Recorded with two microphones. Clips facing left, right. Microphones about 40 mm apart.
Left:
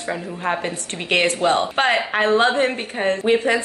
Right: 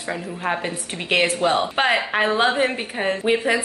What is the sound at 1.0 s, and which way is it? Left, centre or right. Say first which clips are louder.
A woman's voice: left 1 dB; centre.